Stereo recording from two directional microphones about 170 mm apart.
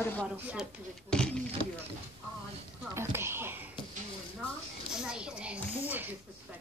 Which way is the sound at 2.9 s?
15° right (ahead or behind).